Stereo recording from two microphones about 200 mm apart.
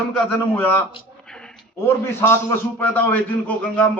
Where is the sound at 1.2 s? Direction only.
5° left (ahead or behind).